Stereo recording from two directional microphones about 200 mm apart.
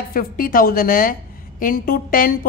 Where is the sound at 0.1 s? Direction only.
45° left (ahead or behind).